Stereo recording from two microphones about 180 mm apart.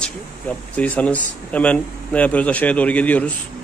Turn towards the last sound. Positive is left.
turn(degrees=10)  # may be behind; listen again after turning